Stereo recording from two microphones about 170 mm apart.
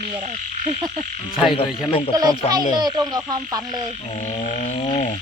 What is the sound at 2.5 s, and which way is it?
Speech, 25° right (ahead or behind).